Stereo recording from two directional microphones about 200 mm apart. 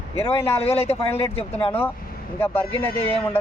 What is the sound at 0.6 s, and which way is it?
Speech, 30° left (ahead or behind).